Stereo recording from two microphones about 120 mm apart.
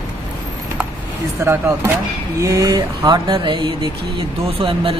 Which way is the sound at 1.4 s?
20° right (ahead or behind).